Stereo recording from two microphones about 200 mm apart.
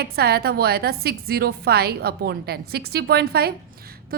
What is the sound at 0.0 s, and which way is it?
A woman's voice, 50° right (ahead or behind).